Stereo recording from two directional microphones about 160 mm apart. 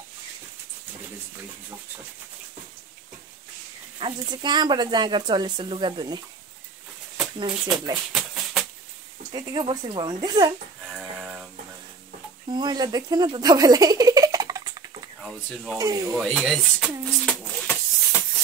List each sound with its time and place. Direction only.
4.0 s speech: 30° right (ahead or behind)
7.3 s speech: 30° right (ahead or behind)
8.1 s typewriter: centre (ahead or behind)
9.3 s speech: 30° right (ahead or behind)
10.9 s a sound: 5° right (ahead or behind)
12.4 s speech: 25° right (ahead or behind)
15.2 s speech: centre (ahead or behind)
15.8 s speech: 20° right (ahead or behind)
16.1 s speech: centre (ahead or behind)
17.3 s music: 10° left (ahead or behind)